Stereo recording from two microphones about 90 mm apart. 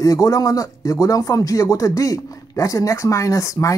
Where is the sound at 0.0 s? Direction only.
40° left (ahead or behind).